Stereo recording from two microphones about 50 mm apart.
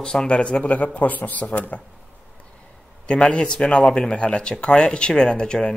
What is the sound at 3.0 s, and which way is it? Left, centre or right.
Speech, left.